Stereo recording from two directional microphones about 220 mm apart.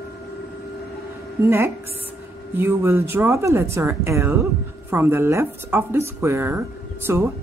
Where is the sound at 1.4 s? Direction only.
10° right (ahead or behind).